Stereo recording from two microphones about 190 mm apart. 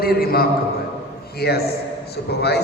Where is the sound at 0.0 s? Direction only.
50° left (ahead or behind).